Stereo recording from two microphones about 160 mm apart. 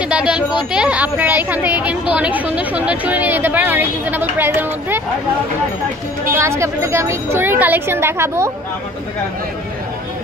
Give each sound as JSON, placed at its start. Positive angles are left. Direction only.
{"t": 0.1, "sound": "a woman's voice", "side_deg": -5}
{"t": 6.3, "sound": "a woman's voice", "side_deg": -15}